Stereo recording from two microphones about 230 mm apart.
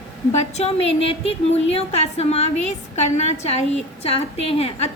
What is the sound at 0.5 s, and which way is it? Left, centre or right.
A woman's voice, left.